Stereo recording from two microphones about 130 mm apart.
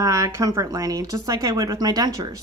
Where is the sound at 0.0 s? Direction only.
25° right (ahead or behind).